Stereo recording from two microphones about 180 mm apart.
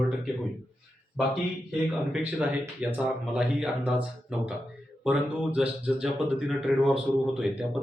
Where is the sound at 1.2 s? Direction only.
5° right (ahead or behind).